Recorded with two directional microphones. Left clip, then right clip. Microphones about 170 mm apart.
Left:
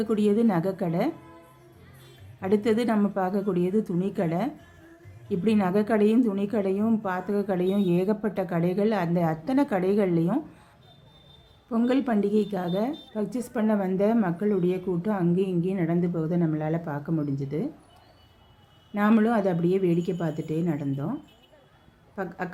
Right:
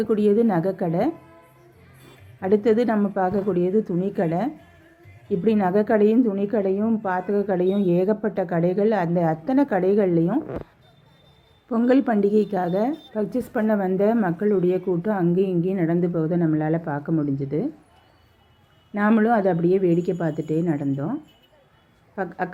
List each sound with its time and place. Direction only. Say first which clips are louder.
0.0 s a woman's voice: right 5 dB; 10° left (ahead or behind)
2.4 s a woman's voice: right 5 dB; 15° left (ahead or behind)
11.7 s a woman's voice: right 5 dB; 5° left (ahead or behind)
18.9 s a woman's voice: right 4 dB; 5° left (ahead or behind)